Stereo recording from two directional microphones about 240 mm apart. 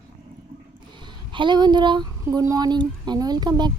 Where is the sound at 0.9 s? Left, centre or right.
Centre.